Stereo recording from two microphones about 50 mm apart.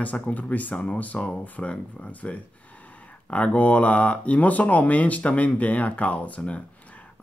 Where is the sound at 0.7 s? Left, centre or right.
Left.